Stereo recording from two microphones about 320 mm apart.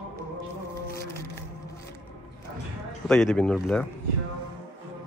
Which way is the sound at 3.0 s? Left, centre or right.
Centre.